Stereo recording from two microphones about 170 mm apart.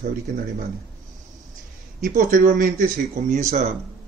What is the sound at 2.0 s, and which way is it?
Speech, 55° right (ahead or behind).